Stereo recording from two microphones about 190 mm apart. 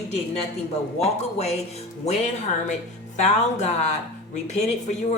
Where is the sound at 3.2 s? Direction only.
35° left (ahead or behind).